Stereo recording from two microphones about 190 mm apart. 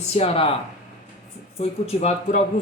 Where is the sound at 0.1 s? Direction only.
30° left (ahead or behind).